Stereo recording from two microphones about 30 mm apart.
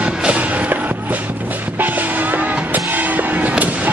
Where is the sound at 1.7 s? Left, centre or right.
Right.